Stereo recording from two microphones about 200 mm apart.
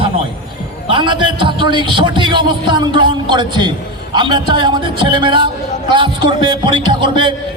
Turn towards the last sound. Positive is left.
turn(degrees=-25)  # may be behind; listen again after turning